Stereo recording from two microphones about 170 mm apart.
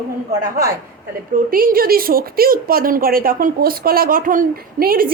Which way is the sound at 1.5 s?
55° right (ahead or behind).